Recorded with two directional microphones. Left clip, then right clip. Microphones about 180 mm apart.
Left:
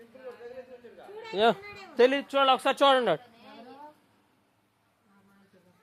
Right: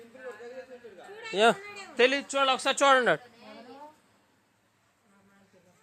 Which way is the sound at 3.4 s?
55° left (ahead or behind).